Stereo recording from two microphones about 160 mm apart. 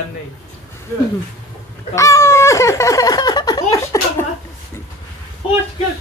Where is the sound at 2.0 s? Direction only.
20° left (ahead or behind).